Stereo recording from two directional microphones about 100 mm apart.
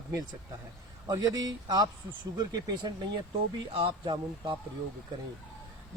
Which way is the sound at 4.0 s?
50° right (ahead or behind).